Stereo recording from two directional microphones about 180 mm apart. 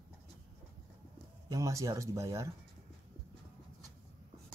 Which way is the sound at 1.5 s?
20° right (ahead or behind).